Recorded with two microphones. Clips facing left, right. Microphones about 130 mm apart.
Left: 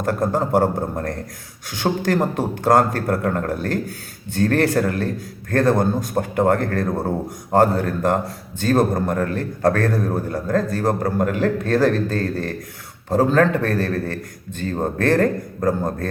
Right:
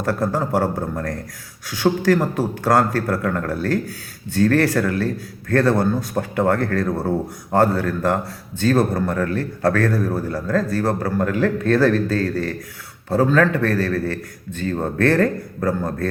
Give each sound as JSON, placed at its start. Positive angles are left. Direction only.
{"t": 0.0, "sound": "a man's voice", "side_deg": 20}